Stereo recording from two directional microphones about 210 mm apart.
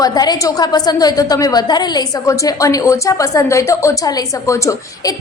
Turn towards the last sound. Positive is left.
turn(degrees=15)  # may be behind; listen again after turning